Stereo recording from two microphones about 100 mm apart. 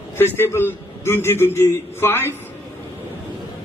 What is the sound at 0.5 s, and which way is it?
A man's voice, 25° left (ahead or behind).